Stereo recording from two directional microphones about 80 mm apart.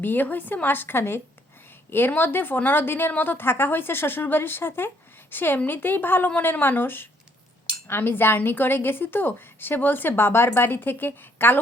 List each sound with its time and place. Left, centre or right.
0.0 s a woman's voice: left